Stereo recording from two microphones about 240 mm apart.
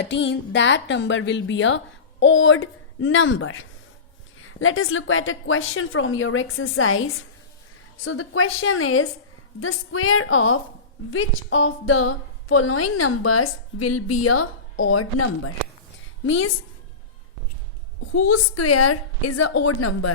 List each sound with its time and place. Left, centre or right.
0.0 s a woman's voice: left
16.2 s a woman's voice: left
18.0 s a woman's voice: left
19.5 s a woman's voice: left